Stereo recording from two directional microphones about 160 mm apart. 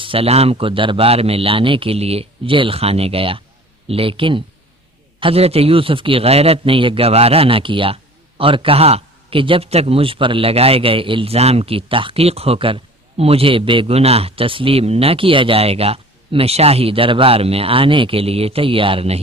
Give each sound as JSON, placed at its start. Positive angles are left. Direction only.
{"t": 0.0, "sound": "a man's voice", "side_deg": -35}